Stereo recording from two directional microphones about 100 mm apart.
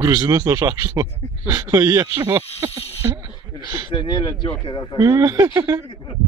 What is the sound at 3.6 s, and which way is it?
Speech, 45° right (ahead or behind).